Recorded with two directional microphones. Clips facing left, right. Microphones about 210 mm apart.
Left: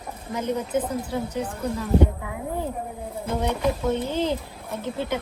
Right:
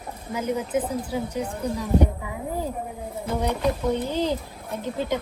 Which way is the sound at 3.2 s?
10° right (ahead or behind).